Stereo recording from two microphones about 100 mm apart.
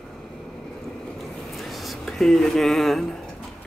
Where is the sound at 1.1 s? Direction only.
Centre (ahead or behind).